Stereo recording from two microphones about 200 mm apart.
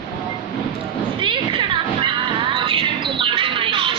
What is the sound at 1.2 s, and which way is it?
Music, 25° right (ahead or behind).